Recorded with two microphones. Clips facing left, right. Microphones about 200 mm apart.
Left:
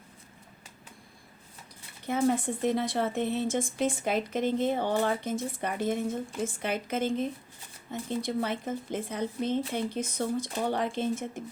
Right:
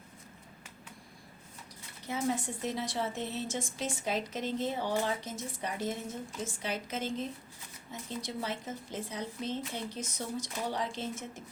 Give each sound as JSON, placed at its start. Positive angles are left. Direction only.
{"t": 2.0, "sound": "a woman's voice", "side_deg": 55}